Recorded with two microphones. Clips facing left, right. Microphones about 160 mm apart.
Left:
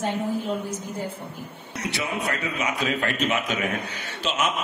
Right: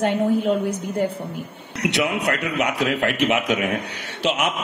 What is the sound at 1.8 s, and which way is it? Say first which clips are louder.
Speech: right 7 dB; 70° right (ahead or behind).